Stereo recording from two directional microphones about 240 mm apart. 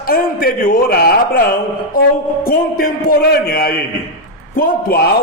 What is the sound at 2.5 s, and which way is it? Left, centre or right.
A man's voice, left.